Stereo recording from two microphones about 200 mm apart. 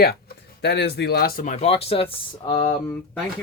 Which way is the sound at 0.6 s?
60° left (ahead or behind).